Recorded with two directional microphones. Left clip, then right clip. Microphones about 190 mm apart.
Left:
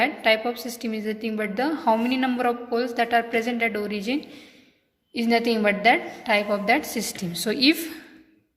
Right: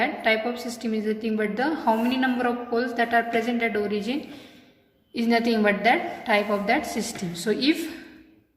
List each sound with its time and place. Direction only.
0.0 s a woman's voice: 30° left (ahead or behind)